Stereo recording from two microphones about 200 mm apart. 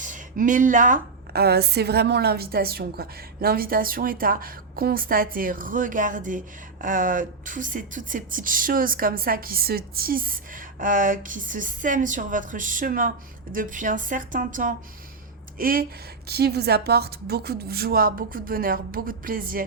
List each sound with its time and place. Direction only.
0.0 s a woman's voice: 40° right (ahead or behind)